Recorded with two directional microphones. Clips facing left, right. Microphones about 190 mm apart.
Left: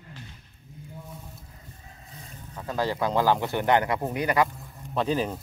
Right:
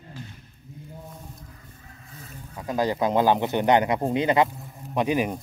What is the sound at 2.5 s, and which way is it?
Speech, 15° right (ahead or behind).